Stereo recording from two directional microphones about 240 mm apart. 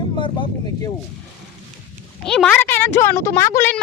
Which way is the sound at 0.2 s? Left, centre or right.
Left.